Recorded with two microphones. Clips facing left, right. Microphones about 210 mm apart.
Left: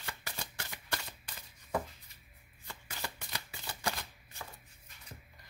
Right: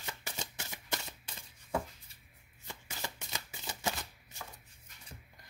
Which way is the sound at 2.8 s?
15° right (ahead or behind).